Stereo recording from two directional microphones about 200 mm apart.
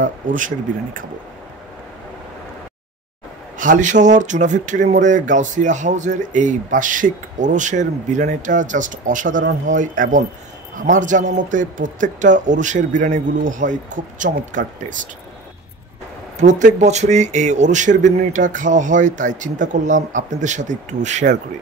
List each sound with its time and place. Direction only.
0.0 s speech: 40° right (ahead or behind)
3.5 s speech: 40° right (ahead or behind)
16.3 s speech: 40° right (ahead or behind)